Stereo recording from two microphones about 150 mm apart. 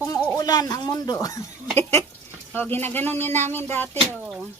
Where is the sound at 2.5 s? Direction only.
15° left (ahead or behind).